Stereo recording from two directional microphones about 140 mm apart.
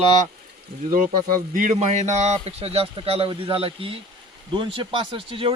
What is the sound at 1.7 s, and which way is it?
A man's voice, 55° right (ahead or behind).